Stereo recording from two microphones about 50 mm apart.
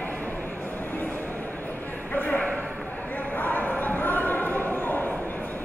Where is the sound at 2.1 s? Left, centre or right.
Left.